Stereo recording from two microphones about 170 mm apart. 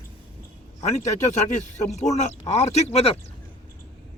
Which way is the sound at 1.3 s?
40° left (ahead or behind).